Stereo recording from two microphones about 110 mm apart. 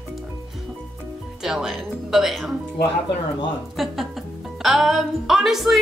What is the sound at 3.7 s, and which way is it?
Speech, centre (ahead or behind).